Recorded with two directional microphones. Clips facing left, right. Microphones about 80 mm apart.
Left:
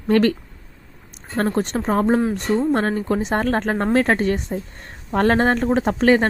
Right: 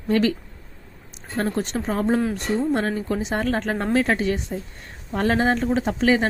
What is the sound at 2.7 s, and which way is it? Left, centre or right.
Speech, left.